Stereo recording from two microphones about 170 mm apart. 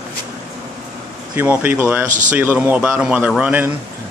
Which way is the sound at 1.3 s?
10° right (ahead or behind).